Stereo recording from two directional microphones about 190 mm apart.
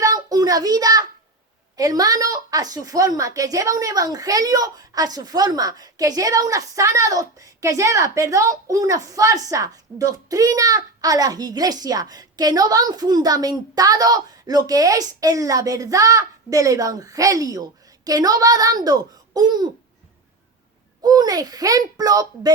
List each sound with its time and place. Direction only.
0.0 s a sound: 20° right (ahead or behind)
1.7 s a woman's voice: 20° right (ahead or behind)
21.0 s a woman's voice: 20° right (ahead or behind)